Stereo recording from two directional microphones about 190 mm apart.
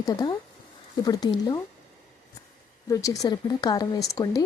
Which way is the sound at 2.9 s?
15° left (ahead or behind).